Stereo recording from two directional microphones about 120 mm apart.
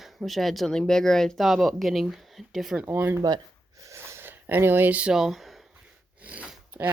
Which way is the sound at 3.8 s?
20° right (ahead or behind).